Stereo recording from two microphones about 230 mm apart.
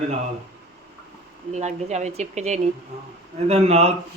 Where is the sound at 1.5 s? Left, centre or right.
Right.